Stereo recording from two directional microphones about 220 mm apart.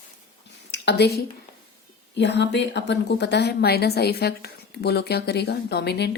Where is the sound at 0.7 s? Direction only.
50° left (ahead or behind).